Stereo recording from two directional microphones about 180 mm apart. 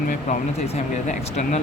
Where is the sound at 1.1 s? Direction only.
40° left (ahead or behind).